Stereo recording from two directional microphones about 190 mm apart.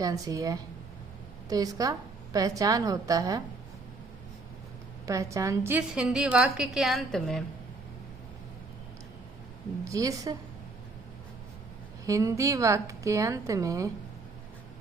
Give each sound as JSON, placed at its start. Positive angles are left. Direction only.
{"t": 0.0, "sound": "a woman's voice", "side_deg": -20}
{"t": 5.0, "sound": "a woman's voice", "side_deg": -15}
{"t": 9.9, "sound": "a woman's voice", "side_deg": -20}
{"t": 12.0, "sound": "a woman's voice", "side_deg": -15}